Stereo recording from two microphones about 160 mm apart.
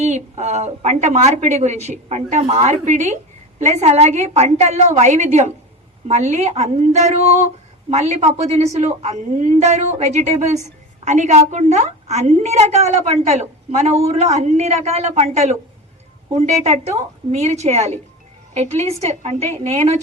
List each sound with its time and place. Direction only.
0.0 s a woman's voice: 45° right (ahead or behind)